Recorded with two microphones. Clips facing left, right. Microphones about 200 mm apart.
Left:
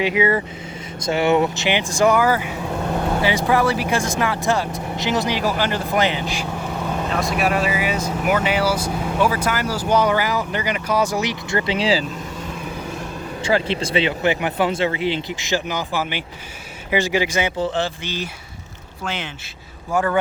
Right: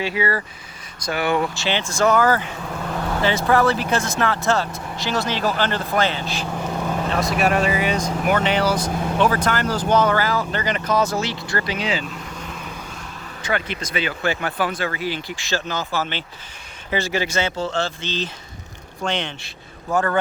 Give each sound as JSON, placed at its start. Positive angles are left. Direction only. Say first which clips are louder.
{"t": 0.0, "sound": "speech", "louder": "left 4 dB", "side_deg": 20}
{"t": 7.2, "sound": "speech", "louder": "right 1 dB", "side_deg": 0}
{"t": 13.4, "sound": "speech", "louder": "left 5 dB", "side_deg": 30}